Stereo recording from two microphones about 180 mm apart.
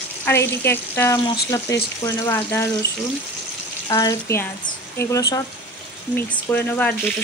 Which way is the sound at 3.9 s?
20° left (ahead or behind).